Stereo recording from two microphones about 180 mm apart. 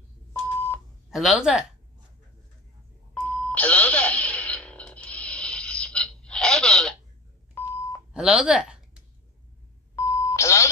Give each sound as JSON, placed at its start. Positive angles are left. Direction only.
{"t": 0.3, "sound": "a sound", "side_deg": 10}
{"t": 1.1, "sound": "speech", "side_deg": 0}
{"t": 3.2, "sound": "a sound", "side_deg": 5}
{"t": 7.5, "sound": "beep", "side_deg": 15}
{"t": 8.1, "sound": "speech", "side_deg": -5}
{"t": 9.9, "sound": "beep", "side_deg": 15}